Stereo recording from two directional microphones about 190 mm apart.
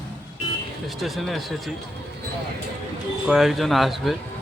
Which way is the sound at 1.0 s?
Centre (ahead or behind).